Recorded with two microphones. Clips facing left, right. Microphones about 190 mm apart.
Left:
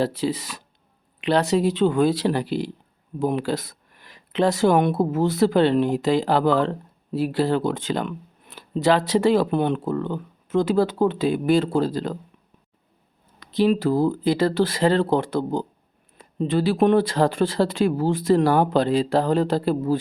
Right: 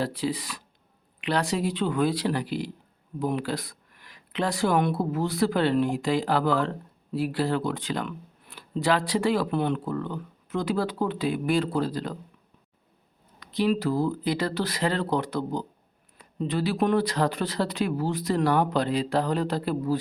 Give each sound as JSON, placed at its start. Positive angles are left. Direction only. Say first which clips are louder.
{"t": 0.0, "sound": "speech", "louder": "left 5 dB", "side_deg": 25}
{"t": 13.4, "sound": "speech", "louder": "left 5 dB", "side_deg": 25}